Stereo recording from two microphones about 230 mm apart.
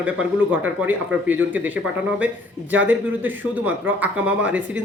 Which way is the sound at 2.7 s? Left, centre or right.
Centre.